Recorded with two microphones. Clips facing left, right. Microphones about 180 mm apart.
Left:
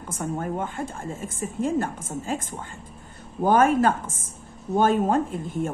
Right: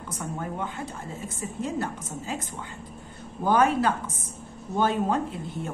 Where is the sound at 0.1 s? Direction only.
50° left (ahead or behind).